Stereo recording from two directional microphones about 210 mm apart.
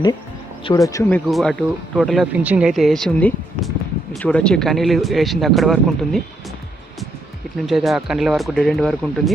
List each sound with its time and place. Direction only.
0.6 s speech: 15° left (ahead or behind)
1.3 s speech: centre (ahead or behind)
7.7 s speech: centre (ahead or behind)